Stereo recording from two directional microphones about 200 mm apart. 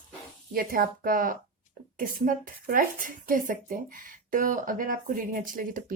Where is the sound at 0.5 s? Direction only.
45° right (ahead or behind).